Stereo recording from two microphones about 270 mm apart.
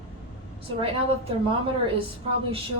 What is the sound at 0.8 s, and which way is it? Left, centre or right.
Speech, centre.